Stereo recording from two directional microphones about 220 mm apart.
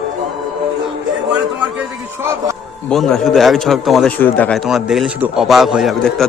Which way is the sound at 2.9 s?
Centre (ahead or behind).